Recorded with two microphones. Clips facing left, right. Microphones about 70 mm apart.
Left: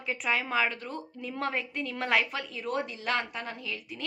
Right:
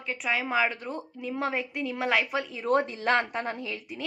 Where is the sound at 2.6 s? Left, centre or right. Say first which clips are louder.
Right 7 dB; right.